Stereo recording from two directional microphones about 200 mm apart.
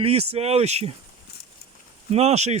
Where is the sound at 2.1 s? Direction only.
30° right (ahead or behind).